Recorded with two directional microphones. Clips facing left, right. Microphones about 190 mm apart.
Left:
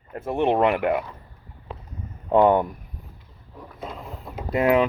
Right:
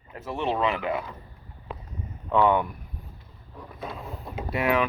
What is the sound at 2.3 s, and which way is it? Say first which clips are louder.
Speech: left 4 dB; 45° left (ahead or behind).